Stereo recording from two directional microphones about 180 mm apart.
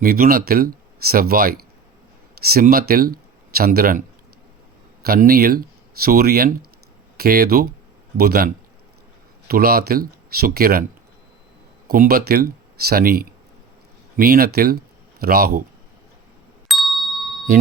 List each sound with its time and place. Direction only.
0.0 s speech: 55° right (ahead or behind)
5.0 s speech: 55° right (ahead or behind)
11.9 s speech: 55° right (ahead or behind)
16.6 s ding: centre (ahead or behind)